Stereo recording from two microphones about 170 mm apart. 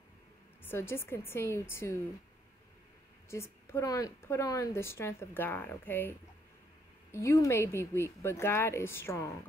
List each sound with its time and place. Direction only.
0.7 s a woman's voice: 15° left (ahead or behind)
3.3 s a woman's voice: 15° left (ahead or behind)